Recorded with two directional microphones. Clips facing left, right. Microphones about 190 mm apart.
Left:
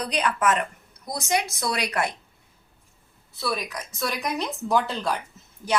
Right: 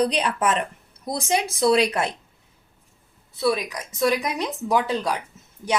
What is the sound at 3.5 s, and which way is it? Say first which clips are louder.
A woman's voice: right 2 dB; 10° right (ahead or behind).